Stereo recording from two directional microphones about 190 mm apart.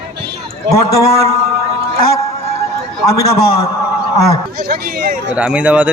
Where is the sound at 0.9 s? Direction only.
15° left (ahead or behind).